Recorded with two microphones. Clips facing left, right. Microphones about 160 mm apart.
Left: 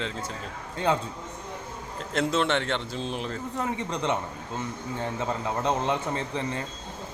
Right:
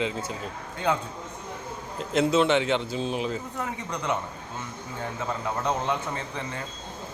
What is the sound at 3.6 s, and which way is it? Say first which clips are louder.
Speech: left 3 dB; 30° left (ahead or behind).